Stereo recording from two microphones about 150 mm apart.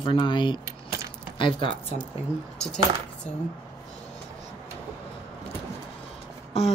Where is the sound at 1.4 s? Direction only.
35° left (ahead or behind).